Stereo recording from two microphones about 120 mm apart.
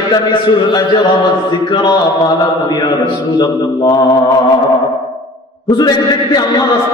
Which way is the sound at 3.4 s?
30° left (ahead or behind).